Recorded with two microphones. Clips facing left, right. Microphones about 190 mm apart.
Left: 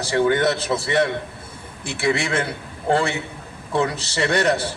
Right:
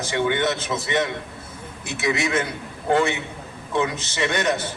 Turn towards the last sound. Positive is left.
turn(degrees=35)  # may be behind; listen again after turning